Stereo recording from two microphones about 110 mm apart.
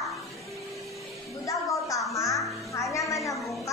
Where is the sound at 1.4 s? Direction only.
30° left (ahead or behind).